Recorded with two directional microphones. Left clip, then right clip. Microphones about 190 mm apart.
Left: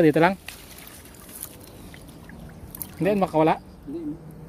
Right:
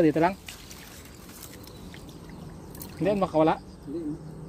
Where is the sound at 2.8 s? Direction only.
30° left (ahead or behind).